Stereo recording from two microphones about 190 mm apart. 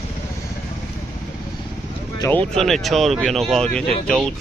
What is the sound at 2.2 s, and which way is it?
Speech, 10° left (ahead or behind).